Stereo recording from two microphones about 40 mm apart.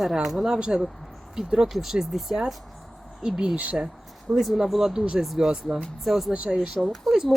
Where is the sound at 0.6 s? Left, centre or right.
Right.